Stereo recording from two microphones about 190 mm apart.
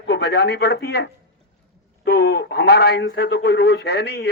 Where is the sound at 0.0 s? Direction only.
60° left (ahead or behind).